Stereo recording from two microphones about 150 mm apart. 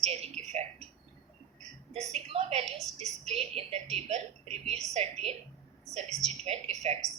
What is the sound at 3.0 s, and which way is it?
A woman's voice, 45° right (ahead or behind).